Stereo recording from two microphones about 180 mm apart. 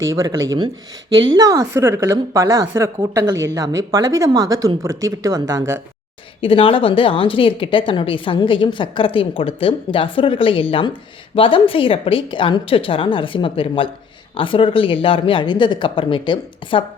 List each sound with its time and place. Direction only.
0.0 s a woman's voice: 20° right (ahead or behind)
6.4 s speech: 30° left (ahead or behind)